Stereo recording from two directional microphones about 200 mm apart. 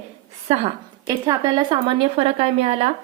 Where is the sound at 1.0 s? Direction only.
15° right (ahead or behind).